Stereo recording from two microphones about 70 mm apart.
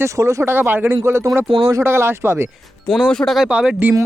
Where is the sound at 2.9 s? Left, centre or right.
Centre.